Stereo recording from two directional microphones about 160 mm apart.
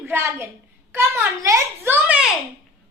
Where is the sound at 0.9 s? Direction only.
20° right (ahead or behind).